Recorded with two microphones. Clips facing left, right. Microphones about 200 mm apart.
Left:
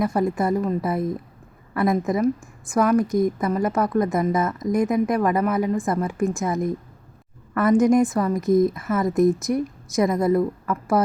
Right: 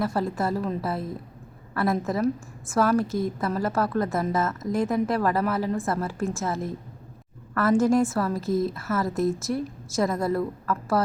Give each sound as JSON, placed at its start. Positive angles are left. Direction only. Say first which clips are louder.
{"t": 0.0, "sound": "a woman's voice", "louder": "left 4 dB", "side_deg": 15}